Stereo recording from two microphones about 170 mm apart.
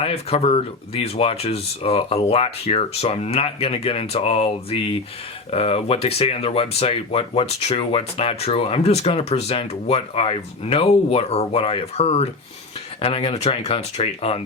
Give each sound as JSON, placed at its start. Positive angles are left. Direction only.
{"t": 0.0, "sound": "speech", "side_deg": 35}